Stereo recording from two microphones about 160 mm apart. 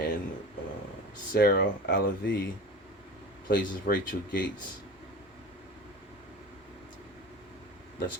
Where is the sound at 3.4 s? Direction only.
75° left (ahead or behind).